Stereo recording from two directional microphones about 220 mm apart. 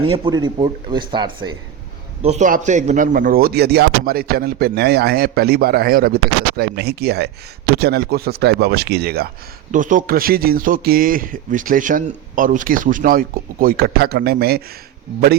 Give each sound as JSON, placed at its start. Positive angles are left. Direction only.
{"t": 0.0, "sound": "speech", "side_deg": -25}
{"t": 2.2, "sound": "a man's voice", "side_deg": -35}